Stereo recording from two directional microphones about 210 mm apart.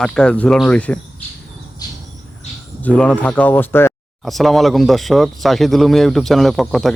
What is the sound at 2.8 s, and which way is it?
Speech, 5° left (ahead or behind).